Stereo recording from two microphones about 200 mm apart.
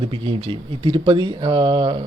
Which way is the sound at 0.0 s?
25° right (ahead or behind).